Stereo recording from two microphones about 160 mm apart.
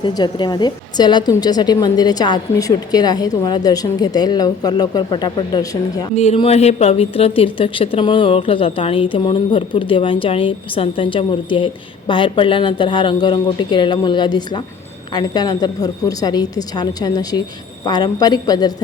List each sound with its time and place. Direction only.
0.0 s a woman's voice: 30° left (ahead or behind)
6.1 s a woman's voice: 40° left (ahead or behind)